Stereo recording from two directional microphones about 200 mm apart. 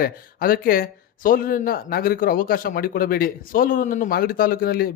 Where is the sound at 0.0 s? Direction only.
45° left (ahead or behind).